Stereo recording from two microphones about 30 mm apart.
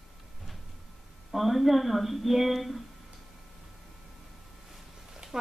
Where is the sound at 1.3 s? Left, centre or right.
Centre.